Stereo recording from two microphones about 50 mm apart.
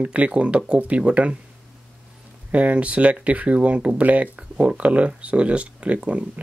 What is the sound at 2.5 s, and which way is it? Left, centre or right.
Speech, right.